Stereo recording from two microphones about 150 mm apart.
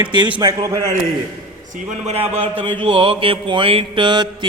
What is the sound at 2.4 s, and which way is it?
A man's voice, 35° right (ahead or behind).